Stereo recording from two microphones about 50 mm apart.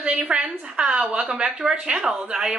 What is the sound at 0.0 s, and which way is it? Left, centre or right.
A woman's voice, centre.